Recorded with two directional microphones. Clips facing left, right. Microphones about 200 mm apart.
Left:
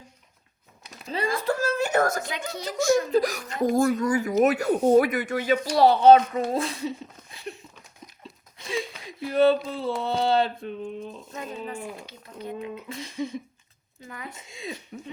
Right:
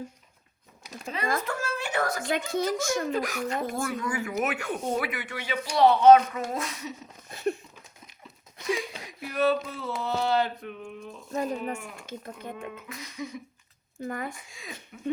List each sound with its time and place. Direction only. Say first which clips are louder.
1.4 s speech: left 7 dB; 35° left (ahead or behind)
2.5 s speech: left 8 dB; 50° right (ahead or behind)
3.1 s speech: left 5 dB; 35° left (ahead or behind)
5.7 s speech: left 1 dB; 35° left (ahead or behind)
7.3 s a sound: right 11 dB; 45° right (ahead or behind)
8.6 s a sound: right 1 dB; 25° left (ahead or behind)
10.0 s speech: left 2 dB; 30° left (ahead or behind)
11.3 s speech: right 9 dB; 40° right (ahead or behind)
12.9 s speech: left 8 dB; 30° left (ahead or behind)
14.0 s speech: right 7 dB; 50° right (ahead or behind)
14.3 s speech: left 7 dB; 25° left (ahead or behind)